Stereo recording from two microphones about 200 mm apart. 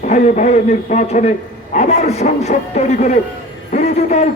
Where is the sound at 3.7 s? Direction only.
35° left (ahead or behind).